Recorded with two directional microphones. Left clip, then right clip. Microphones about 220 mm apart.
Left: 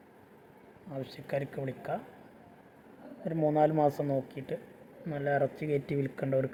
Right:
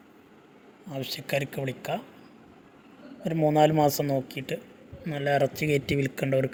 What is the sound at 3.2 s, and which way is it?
Speech, 25° right (ahead or behind).